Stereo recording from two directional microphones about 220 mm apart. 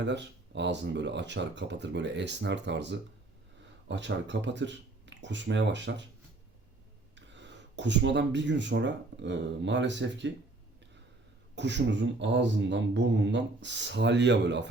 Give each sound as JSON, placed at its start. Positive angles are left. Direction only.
{"t": 0.0, "sound": "speech", "side_deg": -50}
{"t": 7.2, "sound": "speech", "side_deg": -55}
{"t": 11.5, "sound": "speech", "side_deg": -55}